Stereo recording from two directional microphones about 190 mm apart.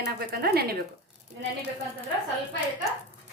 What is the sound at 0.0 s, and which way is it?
Speech, 55° right (ahead or behind).